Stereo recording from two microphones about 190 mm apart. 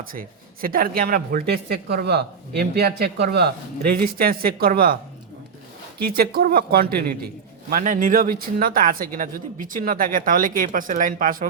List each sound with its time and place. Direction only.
0.1 s a woman's voice: 50° right (ahead or behind)
6.0 s a woman's voice: 50° right (ahead or behind)